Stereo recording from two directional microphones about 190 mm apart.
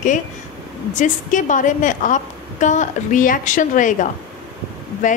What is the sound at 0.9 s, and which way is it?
A woman's voice, 40° left (ahead or behind).